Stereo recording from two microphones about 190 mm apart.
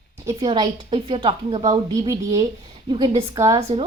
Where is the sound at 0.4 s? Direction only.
25° right (ahead or behind).